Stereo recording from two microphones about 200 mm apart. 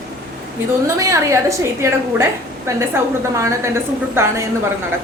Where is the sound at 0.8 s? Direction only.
15° right (ahead or behind).